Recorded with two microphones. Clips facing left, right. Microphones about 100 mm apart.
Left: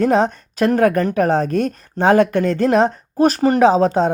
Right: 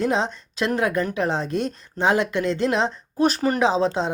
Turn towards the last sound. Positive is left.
turn(degrees=50)  # may be behind; listen again after turning